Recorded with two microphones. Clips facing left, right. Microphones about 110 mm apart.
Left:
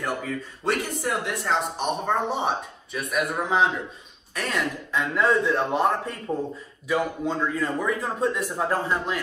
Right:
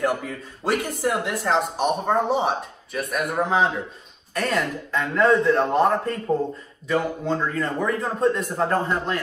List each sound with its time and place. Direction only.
0.7 s speech: centre (ahead or behind)